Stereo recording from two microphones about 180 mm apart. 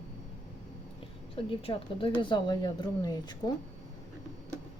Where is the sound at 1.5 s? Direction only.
30° left (ahead or behind).